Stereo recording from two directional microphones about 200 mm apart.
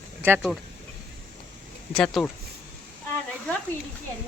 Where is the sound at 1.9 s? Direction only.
5° left (ahead or behind).